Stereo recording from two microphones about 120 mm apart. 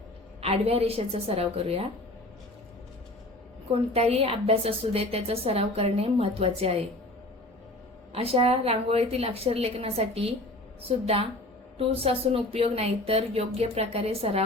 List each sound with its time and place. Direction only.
0.4 s a woman's voice: 55° right (ahead or behind)
3.7 s a woman's voice: 60° right (ahead or behind)
8.1 s a woman's voice: 55° right (ahead or behind)